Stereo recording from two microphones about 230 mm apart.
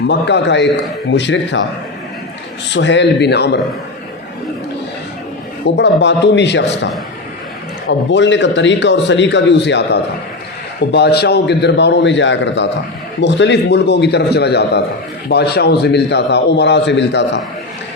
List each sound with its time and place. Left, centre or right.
0.1 s a man's voice: left
2.7 s a man's voice: left
5.6 s a man's voice: left
7.9 s a man's voice: left